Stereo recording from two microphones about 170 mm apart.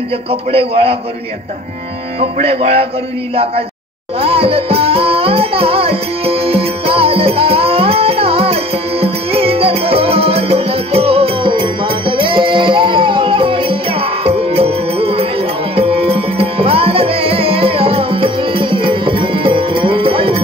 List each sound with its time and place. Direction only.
0.3 s speech: 35° right (ahead or behind)
2.1 s speech: 35° right (ahead or behind)
4.2 s music: 35° right (ahead or behind)